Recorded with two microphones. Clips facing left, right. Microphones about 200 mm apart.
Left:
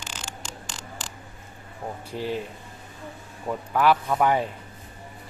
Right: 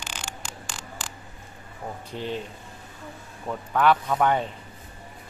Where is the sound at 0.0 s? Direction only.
15° right (ahead or behind).